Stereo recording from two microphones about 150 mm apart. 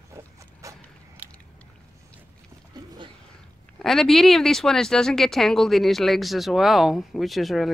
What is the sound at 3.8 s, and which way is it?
Speech, centre (ahead or behind).